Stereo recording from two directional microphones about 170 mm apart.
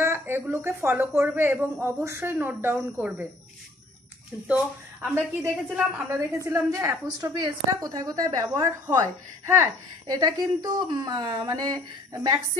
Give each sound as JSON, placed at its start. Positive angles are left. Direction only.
{"t": 0.0, "sound": "a woman's voice", "side_deg": -15}
{"t": 4.5, "sound": "a woman's voice", "side_deg": -10}